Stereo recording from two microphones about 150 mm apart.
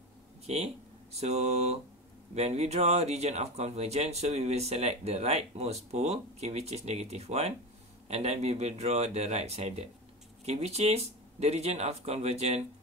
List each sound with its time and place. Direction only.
0.5 s speech: 45° right (ahead or behind)